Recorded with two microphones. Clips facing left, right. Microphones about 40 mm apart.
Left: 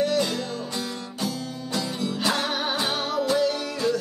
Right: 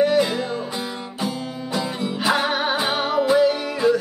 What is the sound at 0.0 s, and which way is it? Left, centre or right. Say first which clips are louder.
Music: right 6 dB; centre.